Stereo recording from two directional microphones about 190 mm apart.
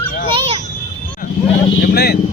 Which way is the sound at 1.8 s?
55° left (ahead or behind).